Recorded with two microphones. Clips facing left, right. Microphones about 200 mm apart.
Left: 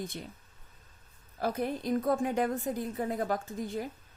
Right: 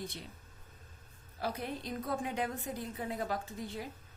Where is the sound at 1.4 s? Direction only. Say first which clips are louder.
Left 7 dB; 50° left (ahead or behind).